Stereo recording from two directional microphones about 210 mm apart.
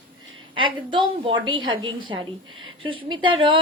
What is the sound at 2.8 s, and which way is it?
Speech, 25° right (ahead or behind).